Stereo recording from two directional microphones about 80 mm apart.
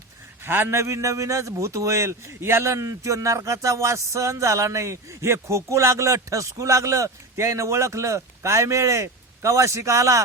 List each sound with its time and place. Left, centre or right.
0.4 s a man's voice: right